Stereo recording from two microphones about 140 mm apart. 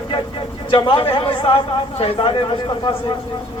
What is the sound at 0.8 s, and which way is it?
A man's voice, 35° left (ahead or behind).